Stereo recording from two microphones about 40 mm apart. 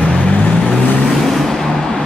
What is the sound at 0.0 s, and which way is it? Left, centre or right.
Vehicle, left.